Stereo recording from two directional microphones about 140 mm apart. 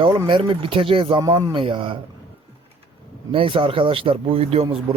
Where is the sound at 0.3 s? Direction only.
35° right (ahead or behind).